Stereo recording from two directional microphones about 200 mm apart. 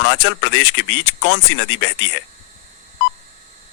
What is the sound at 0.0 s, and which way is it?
Speech, 65° left (ahead or behind).